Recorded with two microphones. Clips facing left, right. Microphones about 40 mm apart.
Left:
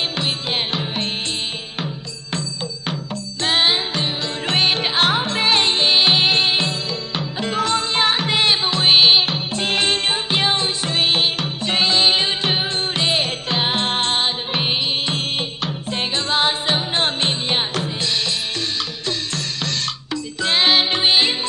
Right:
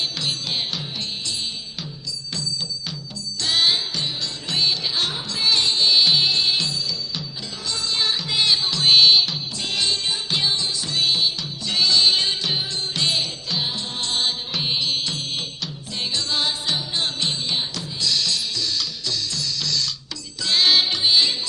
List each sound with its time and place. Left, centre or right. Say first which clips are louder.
0.2 s music: left 4 dB; left
3.4 s music: left 3 dB; left
20.4 s music: left 2 dB; left
20.9 s music: left 3 dB; left